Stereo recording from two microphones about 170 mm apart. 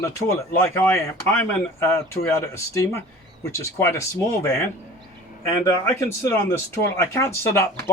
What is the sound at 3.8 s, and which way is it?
Speech, 15° left (ahead or behind).